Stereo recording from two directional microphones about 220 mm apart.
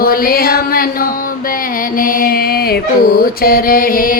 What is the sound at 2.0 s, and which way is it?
Mantra, 40° left (ahead or behind).